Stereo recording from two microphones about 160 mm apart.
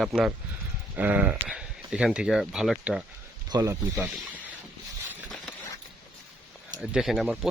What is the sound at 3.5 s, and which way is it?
Speech, 25° right (ahead or behind).